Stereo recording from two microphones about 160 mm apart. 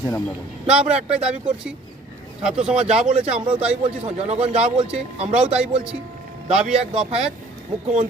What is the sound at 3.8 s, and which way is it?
Speech, 40° right (ahead or behind).